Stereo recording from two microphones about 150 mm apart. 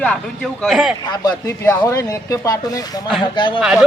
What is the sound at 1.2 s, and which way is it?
Speech, 20° left (ahead or behind).